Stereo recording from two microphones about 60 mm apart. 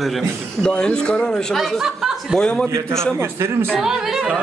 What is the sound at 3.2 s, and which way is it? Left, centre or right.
Speech, right.